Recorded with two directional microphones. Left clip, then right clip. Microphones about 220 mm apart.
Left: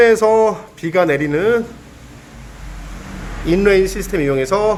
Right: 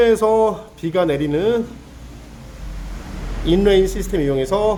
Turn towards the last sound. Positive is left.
turn(degrees=-15)  # may be behind; listen again after turning